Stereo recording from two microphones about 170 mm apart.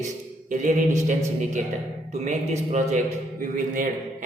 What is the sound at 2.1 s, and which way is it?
A man's voice, 45° right (ahead or behind).